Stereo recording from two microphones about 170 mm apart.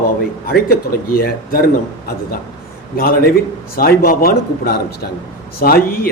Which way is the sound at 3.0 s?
60° left (ahead or behind).